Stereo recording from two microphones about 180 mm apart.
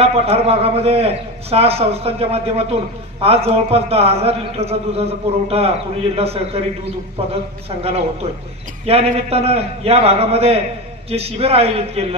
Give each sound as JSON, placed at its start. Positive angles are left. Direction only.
{"t": 0.0, "sound": "a man's voice", "side_deg": -35}
{"t": 7.8, "sound": "a man's voice", "side_deg": -35}